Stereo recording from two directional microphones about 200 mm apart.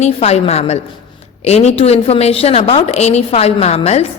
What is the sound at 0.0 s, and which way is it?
A woman's voice, 30° left (ahead or behind).